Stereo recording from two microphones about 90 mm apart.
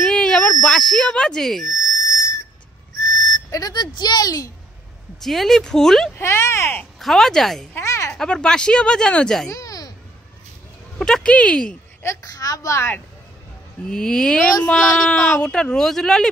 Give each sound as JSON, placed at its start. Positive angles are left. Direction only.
{"t": 0.0, "sound": "speech", "side_deg": 10}
{"t": 3.4, "sound": "speech", "side_deg": 40}
{"t": 5.2, "sound": "speech", "side_deg": 5}
{"t": 6.1, "sound": "speech", "side_deg": 30}
{"t": 7.0, "sound": "speech", "side_deg": 0}
{"t": 7.7, "sound": "a sound", "side_deg": 35}
{"t": 8.2, "sound": "speech", "side_deg": 10}
{"t": 9.5, "sound": "a sound", "side_deg": 40}
{"t": 11.0, "sound": "speech", "side_deg": 5}
{"t": 12.0, "sound": "a woman's voice", "side_deg": 35}
{"t": 13.8, "sound": "speech", "side_deg": 5}